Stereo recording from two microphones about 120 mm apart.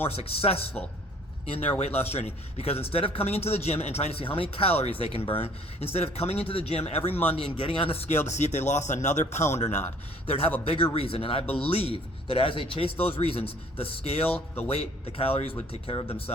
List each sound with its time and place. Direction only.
0.0 s a man's voice: 55° left (ahead or behind)
8.3 s speech: 70° left (ahead or behind)
10.2 s speech: 50° left (ahead or behind)
14.3 s speech: 15° left (ahead or behind)
14.7 s speech: 55° left (ahead or behind)